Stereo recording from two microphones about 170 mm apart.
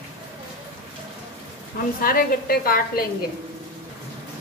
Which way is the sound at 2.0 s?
60° left (ahead or behind).